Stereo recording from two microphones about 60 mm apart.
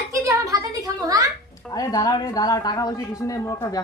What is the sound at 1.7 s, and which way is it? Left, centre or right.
Speech, left.